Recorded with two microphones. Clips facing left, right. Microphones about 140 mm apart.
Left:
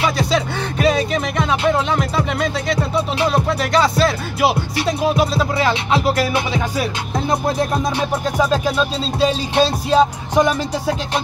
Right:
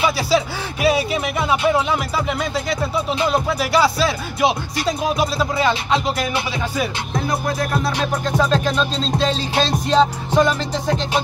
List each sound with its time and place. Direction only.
0.0 s speech: 5° right (ahead or behind)
3.3 s speech: 5° right (ahead or behind)
7.2 s music: 25° left (ahead or behind)
8.4 s music: 10° left (ahead or behind)